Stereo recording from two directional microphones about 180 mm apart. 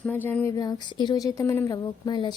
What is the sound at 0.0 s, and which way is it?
Speech, 10° left (ahead or behind).